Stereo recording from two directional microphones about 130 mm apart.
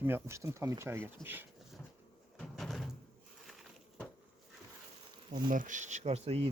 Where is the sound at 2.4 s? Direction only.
Centre (ahead or behind).